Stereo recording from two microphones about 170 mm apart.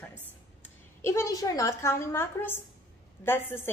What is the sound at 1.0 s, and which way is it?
A woman's voice, 15° left (ahead or behind).